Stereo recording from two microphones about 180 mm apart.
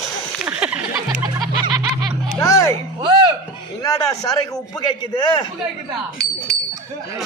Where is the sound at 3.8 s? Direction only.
20° left (ahead or behind).